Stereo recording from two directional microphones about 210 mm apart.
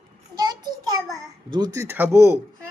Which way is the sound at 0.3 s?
20° right (ahead or behind).